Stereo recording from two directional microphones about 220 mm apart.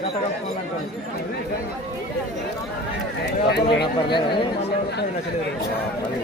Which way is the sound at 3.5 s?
50° left (ahead or behind).